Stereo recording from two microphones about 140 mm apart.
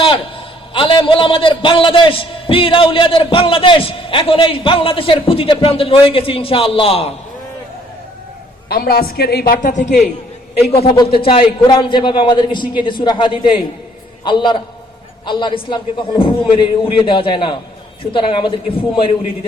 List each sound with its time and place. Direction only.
0.7 s a man's voice: 35° left (ahead or behind)
8.7 s a woman's voice: 90° left; by 10.1 s 60° left (ahead or behind)
10.7 s a man's voice: 45° left (ahead or behind)